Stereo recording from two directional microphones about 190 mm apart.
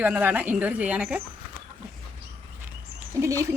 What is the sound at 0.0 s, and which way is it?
Speech, 10° right (ahead or behind).